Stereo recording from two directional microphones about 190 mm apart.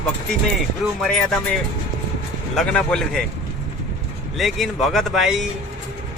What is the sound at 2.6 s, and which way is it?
Speech, 5° left (ahead or behind).